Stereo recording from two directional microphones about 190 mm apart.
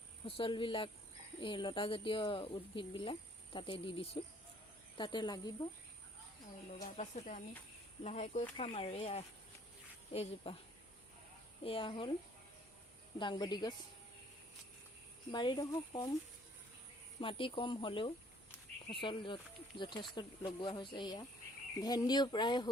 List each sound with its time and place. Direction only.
0.3 s speech: 30° left (ahead or behind)
6.8 s speech: 40° left (ahead or behind)
11.6 s speech: 30° left (ahead or behind)
13.1 s speech: 25° left (ahead or behind)
15.3 s speech: 25° left (ahead or behind)
17.2 s speech: 25° left (ahead or behind)